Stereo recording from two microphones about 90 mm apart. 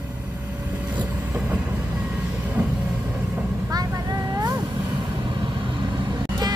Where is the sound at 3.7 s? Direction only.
45° right (ahead or behind).